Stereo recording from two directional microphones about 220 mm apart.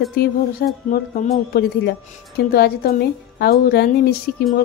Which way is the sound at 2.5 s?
45° left (ahead or behind).